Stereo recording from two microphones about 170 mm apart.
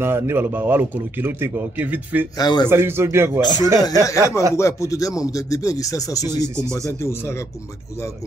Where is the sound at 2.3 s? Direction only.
25° left (ahead or behind).